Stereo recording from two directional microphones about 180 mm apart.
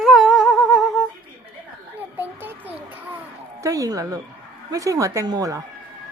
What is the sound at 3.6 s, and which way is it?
A woman's voice, 20° right (ahead or behind).